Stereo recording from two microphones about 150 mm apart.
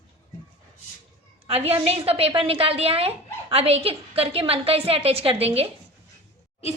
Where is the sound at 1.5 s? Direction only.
40° right (ahead or behind).